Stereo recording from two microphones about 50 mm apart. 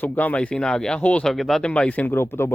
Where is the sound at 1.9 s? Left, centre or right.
Left.